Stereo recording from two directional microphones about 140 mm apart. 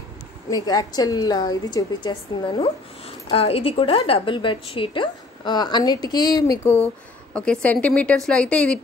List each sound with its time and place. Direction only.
0.5 s a woman's voice: 25° left (ahead or behind)
3.3 s a woman's voice: 45° left (ahead or behind); by 6.6 s 30° left (ahead or behind)
6.6 s a woman's voice: 15° left (ahead or behind)